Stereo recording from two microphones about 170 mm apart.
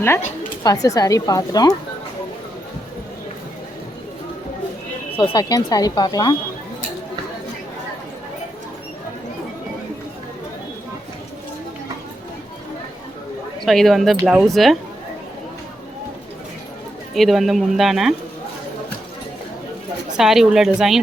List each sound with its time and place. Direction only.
0.6 s speech: 20° left (ahead or behind)
5.1 s speech: 25° left (ahead or behind)
13.7 s speech: centre (ahead or behind)
17.2 s speech: centre (ahead or behind)
20.1 s speech: centre (ahead or behind)